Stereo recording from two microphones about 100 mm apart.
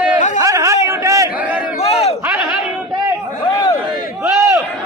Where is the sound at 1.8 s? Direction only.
90° left.